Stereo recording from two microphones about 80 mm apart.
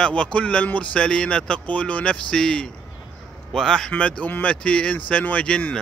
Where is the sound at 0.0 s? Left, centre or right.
Centre.